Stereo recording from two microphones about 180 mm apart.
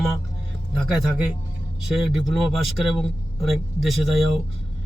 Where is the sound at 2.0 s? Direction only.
Centre (ahead or behind).